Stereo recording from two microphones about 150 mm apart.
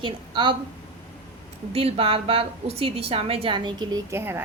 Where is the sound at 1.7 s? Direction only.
40° right (ahead or behind).